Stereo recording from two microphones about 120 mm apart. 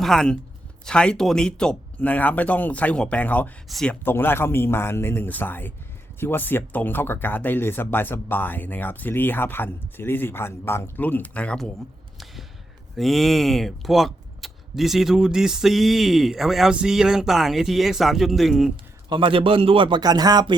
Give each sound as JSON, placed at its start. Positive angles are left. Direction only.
{"t": 0.0, "sound": "speech", "side_deg": 5}
{"t": 3.7, "sound": "speech", "side_deg": 0}
{"t": 4.0, "sound": "a man's voice", "side_deg": 20}
{"t": 12.1, "sound": "a sound", "side_deg": 0}
{"t": 13.0, "sound": "speech", "side_deg": 0}
{"t": 19.0, "sound": "a man's voice", "side_deg": -45}
{"t": 20.0, "sound": "speech", "side_deg": -35}